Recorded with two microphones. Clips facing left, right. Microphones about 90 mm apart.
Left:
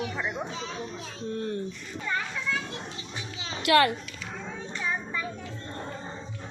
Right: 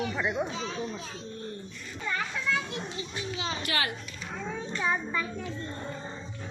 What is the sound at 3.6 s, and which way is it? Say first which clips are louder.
Speech: left 13 dB; 75° left (ahead or behind).